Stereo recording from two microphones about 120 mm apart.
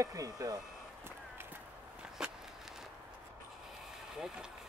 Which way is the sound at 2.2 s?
5° right (ahead or behind).